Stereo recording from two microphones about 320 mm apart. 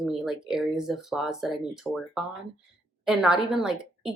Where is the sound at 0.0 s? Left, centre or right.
Centre.